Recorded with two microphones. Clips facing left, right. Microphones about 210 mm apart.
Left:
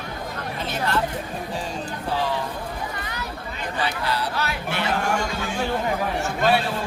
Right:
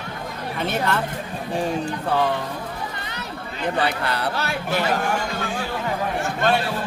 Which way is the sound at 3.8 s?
60° right (ahead or behind).